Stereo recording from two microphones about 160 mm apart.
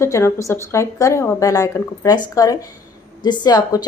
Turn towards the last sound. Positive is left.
turn(degrees=25)  # may be behind; listen again after turning